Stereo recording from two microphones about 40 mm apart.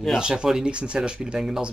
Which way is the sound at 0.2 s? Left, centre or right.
Centre.